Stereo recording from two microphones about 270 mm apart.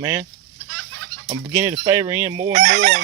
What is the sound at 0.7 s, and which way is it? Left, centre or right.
Chicken, right.